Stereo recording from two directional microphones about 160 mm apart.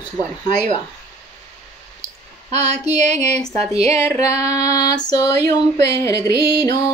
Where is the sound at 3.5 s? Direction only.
20° left (ahead or behind).